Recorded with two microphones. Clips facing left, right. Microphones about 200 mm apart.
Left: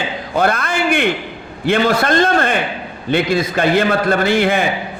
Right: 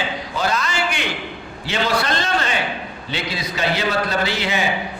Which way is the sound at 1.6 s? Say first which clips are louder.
Left 7 dB; 50° left (ahead or behind).